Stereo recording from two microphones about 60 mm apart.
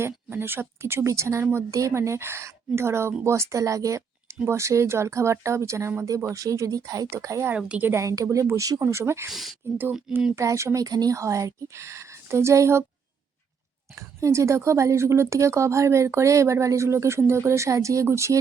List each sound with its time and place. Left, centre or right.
0.0 s speech: right
7.1 s speech: right
7.5 s a woman's voice: right
8.1 s speech: right
8.8 s speech: right
9.3 s speech: centre
10.3 s speech: right
10.8 s speech: right
14.2 s speech: right